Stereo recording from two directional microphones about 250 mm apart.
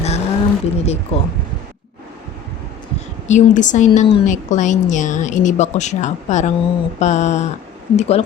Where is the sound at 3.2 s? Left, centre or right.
Left.